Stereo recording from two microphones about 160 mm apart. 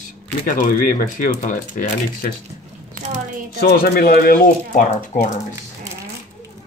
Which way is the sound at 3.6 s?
80° left.